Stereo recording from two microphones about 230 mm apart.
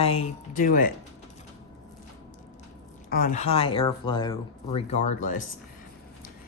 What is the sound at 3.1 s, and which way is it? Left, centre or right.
Speech, left.